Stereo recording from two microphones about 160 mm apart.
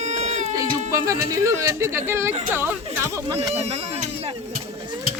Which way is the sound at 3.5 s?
40° right (ahead or behind).